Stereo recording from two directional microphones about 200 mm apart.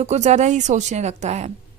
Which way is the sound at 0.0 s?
35° right (ahead or behind).